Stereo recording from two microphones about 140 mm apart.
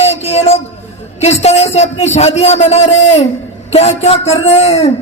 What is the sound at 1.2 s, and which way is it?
A woman's voice, 50° left (ahead or behind).